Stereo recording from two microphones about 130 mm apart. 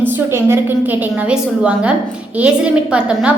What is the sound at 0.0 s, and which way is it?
Speech, 20° right (ahead or behind).